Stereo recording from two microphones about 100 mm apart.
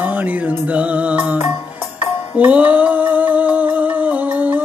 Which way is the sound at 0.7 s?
15° right (ahead or behind).